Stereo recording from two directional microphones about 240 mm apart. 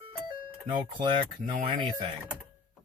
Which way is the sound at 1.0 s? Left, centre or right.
Centre.